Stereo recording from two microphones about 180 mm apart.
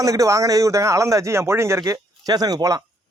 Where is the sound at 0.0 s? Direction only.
20° right (ahead or behind).